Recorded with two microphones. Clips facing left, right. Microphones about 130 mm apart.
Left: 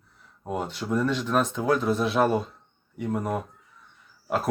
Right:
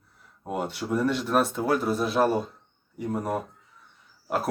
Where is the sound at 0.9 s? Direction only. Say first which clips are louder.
Even; 10° right (ahead or behind).